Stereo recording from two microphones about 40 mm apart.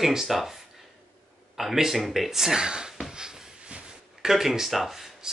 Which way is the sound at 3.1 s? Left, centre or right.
Centre.